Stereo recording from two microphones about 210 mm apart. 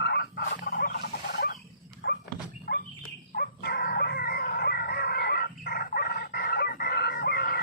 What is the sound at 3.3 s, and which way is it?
Dog, 45° left (ahead or behind).